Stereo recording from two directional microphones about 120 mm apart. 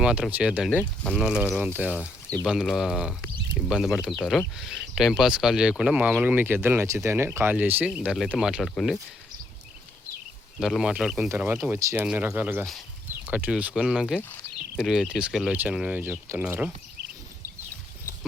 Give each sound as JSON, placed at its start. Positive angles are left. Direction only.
{"t": 0.0, "sound": "speech", "side_deg": -10}
{"t": 0.7, "sound": "speech", "side_deg": 5}
{"t": 1.5, "sound": "speech", "side_deg": -5}
{"t": 10.6, "sound": "speech", "side_deg": 0}
{"t": 11.3, "sound": "speech", "side_deg": -20}